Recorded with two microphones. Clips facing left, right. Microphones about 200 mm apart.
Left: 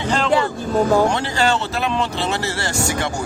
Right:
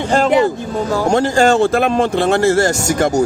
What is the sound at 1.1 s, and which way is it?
Speech, 45° right (ahead or behind).